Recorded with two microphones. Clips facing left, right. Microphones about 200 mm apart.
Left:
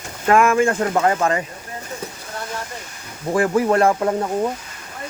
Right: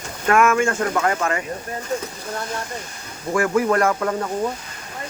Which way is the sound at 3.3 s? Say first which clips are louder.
Left 2 dB; 30° left (ahead or behind).